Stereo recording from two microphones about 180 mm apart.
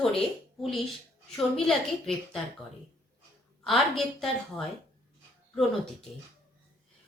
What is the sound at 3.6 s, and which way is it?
A woman's voice, centre (ahead or behind).